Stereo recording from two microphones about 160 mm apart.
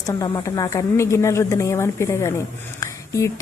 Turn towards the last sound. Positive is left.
turn(degrees=20)  # may be behind; listen again after turning